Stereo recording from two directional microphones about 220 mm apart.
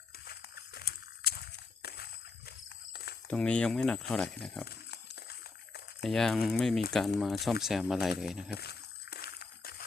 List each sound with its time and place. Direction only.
0.3 s a sound: 45° left (ahead or behind)
2.5 s wild animals: 45° left (ahead or behind)
3.2 s speech: 5° left (ahead or behind)
4.6 s pig: 45° left (ahead or behind)
6.0 s speech: centre (ahead or behind)
8.4 s a sound: 45° left (ahead or behind)